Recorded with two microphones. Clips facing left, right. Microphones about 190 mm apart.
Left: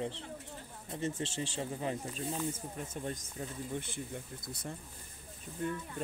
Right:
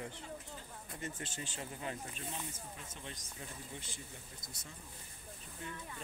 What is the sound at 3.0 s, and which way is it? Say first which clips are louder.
Speech: left 10 dB; 45° left (ahead or behind).